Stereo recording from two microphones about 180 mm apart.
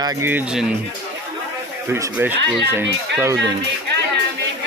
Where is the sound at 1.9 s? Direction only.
10° right (ahead or behind).